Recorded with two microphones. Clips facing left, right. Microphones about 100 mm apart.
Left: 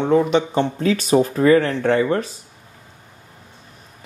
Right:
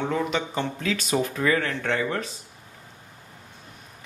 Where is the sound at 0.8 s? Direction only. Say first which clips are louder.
Left 9 dB; 40° left (ahead or behind).